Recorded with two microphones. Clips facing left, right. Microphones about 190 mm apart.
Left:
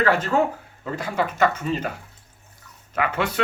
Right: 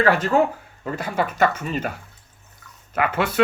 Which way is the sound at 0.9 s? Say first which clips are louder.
Right 1 dB; 55° right (ahead or behind).